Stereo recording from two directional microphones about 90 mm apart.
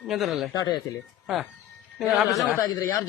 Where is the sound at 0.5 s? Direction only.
50° left (ahead or behind).